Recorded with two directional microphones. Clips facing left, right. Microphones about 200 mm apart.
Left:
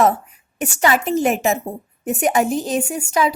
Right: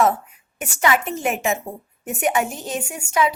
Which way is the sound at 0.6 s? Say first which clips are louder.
Left 3 dB; 35° left (ahead or behind).